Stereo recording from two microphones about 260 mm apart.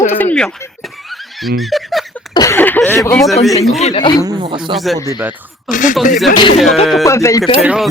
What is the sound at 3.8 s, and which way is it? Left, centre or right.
Speech, left.